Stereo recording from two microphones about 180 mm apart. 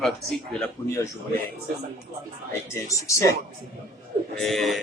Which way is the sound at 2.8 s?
15° left (ahead or behind).